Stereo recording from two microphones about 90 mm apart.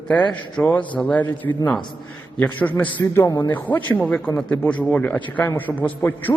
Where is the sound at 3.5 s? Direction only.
20° left (ahead or behind).